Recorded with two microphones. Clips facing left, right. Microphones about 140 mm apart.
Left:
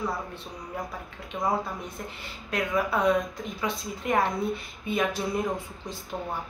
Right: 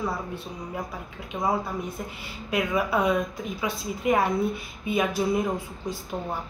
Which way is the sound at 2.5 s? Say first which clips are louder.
Right 2 dB; 10° right (ahead or behind).